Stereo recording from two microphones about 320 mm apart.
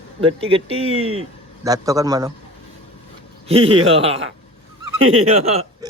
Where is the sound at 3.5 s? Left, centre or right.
Centre.